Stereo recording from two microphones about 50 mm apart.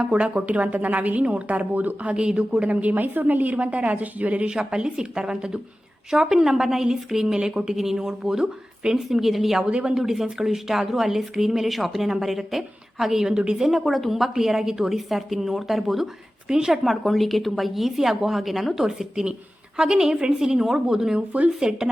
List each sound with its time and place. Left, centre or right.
0.0 s a woman's voice: right
2.1 s a woman's voice: centre
2.6 s a woman's voice: right
4.4 s speech: centre
9.6 s a woman's voice: right
9.9 s speech: centre
13.7 s speech: centre